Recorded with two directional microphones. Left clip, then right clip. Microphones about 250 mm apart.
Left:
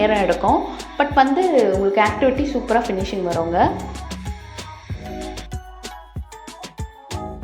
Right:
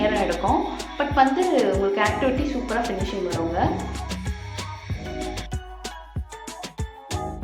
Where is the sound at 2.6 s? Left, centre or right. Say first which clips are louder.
Left 6 dB; centre.